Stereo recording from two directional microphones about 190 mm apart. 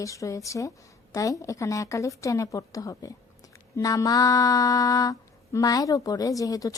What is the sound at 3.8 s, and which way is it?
Mantra, 20° left (ahead or behind).